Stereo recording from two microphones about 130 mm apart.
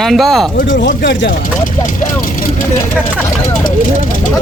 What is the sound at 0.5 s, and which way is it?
Speech, 90° left.